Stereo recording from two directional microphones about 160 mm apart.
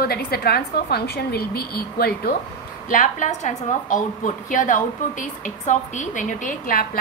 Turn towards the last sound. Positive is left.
turn(degrees=60)  # may be behind; listen again after turning